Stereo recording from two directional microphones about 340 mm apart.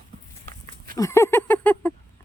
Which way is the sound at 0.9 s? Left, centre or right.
Centre.